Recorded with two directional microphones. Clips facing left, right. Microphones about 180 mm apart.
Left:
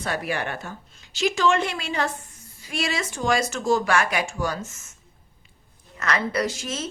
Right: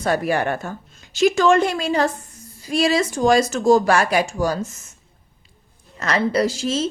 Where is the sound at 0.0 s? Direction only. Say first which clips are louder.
Right 8 dB; 40° right (ahead or behind).